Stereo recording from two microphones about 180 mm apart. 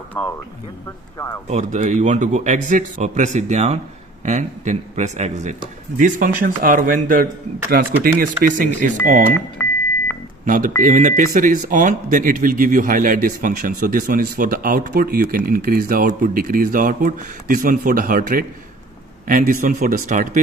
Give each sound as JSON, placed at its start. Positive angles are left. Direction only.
{"t": 0.1, "sound": "speech", "side_deg": 10}
{"t": 1.5, "sound": "a man's voice", "side_deg": -40}
{"t": 10.4, "sound": "speech", "side_deg": -45}